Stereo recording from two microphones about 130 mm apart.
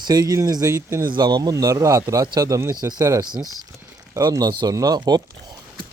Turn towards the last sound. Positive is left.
turn(degrees=-30)  # may be behind; listen again after turning